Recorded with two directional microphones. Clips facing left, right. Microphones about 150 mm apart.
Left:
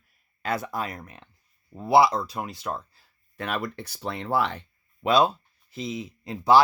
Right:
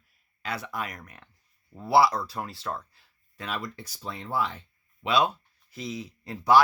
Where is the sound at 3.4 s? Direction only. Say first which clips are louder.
Left 5 dB; 60° left (ahead or behind).